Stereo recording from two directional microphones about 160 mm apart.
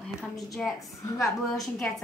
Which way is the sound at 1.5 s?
Centre (ahead or behind).